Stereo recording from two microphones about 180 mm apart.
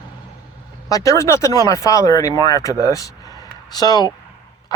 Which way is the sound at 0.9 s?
20° left (ahead or behind).